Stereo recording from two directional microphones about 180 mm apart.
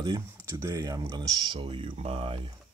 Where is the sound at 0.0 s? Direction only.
20° right (ahead or behind).